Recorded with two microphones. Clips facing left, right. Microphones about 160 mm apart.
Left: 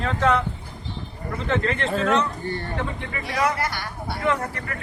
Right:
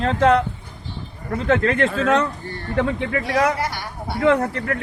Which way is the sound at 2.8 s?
85° right.